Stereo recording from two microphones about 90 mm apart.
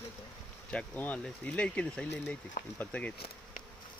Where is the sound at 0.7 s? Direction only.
15° left (ahead or behind).